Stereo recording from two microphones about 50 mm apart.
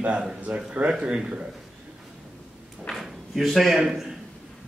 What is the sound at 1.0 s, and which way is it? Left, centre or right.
Speech, centre.